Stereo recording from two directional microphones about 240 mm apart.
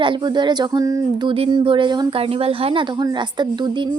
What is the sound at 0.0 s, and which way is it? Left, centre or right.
Speech, centre.